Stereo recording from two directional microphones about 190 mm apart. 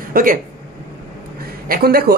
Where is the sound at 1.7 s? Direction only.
55° right (ahead or behind).